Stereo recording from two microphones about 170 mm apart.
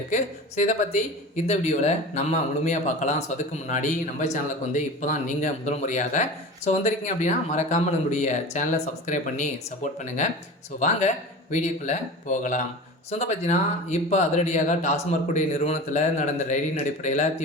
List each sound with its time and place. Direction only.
0.1 s speech: 45° left (ahead or behind)